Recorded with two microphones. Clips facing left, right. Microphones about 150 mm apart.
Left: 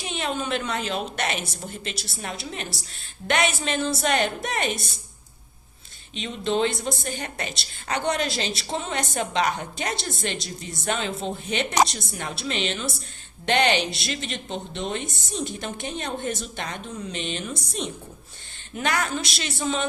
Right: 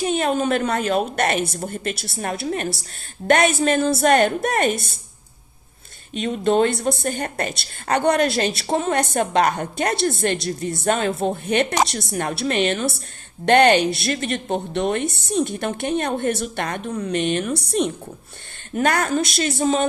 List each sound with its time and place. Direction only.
0.0 s a woman's voice: 50° right (ahead or behind)
6.1 s a woman's voice: 50° right (ahead or behind)
18.7 s a woman's voice: 50° right (ahead or behind)